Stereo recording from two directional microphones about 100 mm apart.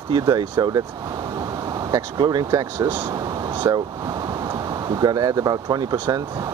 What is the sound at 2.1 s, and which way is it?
Speech, 50° right (ahead or behind).